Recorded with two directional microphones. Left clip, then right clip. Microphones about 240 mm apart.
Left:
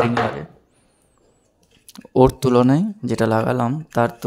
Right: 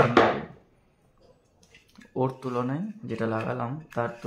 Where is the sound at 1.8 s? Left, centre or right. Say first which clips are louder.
Left 14 dB; left.